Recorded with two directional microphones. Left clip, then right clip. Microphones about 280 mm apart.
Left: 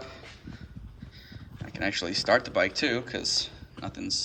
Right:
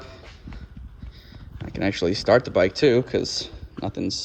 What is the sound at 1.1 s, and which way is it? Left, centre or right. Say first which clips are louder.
Speech: right 1 dB; right.